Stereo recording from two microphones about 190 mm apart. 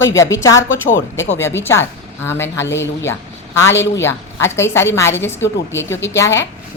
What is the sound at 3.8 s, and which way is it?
A woman's voice, 15° left (ahead or behind).